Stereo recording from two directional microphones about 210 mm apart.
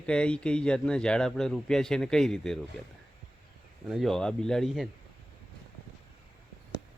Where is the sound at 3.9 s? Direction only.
Centre (ahead or behind).